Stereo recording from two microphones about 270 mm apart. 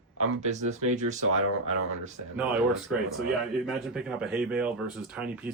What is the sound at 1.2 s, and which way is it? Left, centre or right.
Speech, right.